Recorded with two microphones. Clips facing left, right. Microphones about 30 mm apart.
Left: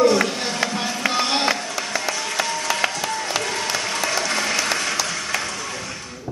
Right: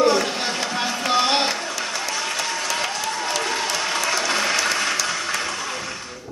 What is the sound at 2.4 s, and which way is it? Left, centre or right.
Applause, centre.